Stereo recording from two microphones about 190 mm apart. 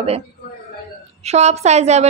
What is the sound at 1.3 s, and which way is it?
Speech, 35° right (ahead or behind).